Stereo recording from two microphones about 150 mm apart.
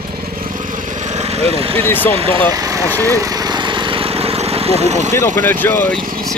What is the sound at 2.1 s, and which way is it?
Speech, 40° right (ahead or behind).